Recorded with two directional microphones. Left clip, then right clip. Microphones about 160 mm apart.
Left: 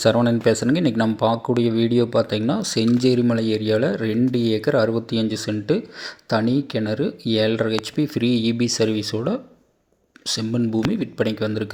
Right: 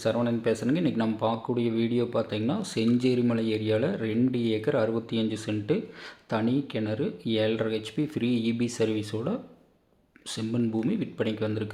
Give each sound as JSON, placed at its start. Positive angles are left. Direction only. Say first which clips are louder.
{"t": 0.0, "sound": "speech", "louder": "left 9 dB", "side_deg": 50}